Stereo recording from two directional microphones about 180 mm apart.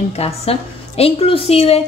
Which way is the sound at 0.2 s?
35° left (ahead or behind).